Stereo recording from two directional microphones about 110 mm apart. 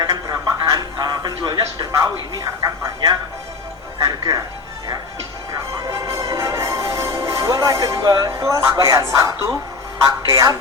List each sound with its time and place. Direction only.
0.0 s radio: 35° right (ahead or behind)
2.3 s speech: 30° right (ahead or behind)
5.9 s music: 30° right (ahead or behind)
10.1 s speech: 30° right (ahead or behind)